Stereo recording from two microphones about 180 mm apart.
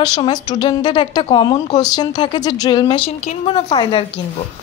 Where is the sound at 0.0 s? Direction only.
25° left (ahead or behind).